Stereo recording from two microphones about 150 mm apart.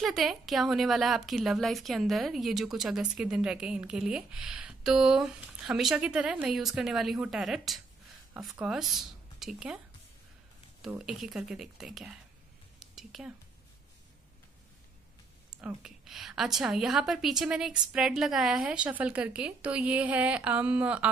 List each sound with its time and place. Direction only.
0.0 s a woman's voice: centre (ahead or behind)
10.8 s a woman's voice: 5° right (ahead or behind)
15.6 s a woman's voice: 5° right (ahead or behind)